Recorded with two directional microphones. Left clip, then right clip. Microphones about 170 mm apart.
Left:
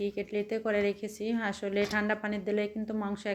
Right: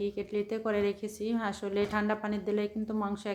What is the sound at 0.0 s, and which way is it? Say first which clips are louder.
A woman's voice: even; 5° left (ahead or behind).